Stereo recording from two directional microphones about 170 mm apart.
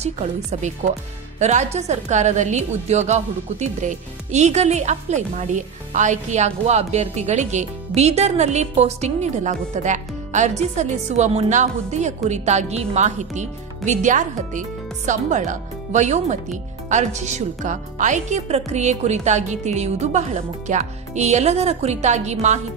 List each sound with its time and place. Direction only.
0.0 s a woman's voice: 40° right (ahead or behind)